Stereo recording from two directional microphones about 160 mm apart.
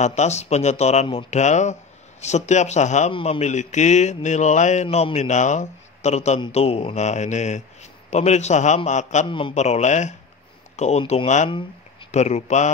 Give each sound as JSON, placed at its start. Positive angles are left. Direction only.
{"t": 0.0, "sound": "a man's voice", "side_deg": 45}
{"t": 3.1, "sound": "a man's voice", "side_deg": 35}